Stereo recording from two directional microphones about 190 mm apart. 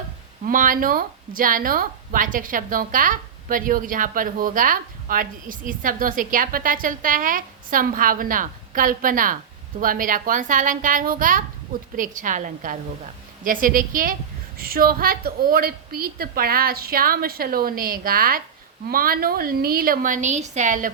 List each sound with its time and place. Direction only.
0.4 s a woman's voice: 45° right (ahead or behind)